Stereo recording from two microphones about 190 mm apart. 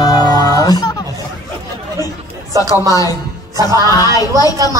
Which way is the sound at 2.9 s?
20° left (ahead or behind).